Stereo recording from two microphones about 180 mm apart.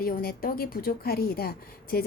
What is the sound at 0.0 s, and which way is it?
A woman's voice, 55° left (ahead or behind).